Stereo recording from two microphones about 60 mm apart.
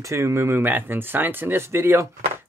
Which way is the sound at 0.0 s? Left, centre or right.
Right.